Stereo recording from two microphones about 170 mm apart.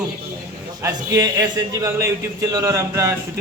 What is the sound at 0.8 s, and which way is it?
A man's voice, 20° right (ahead or behind).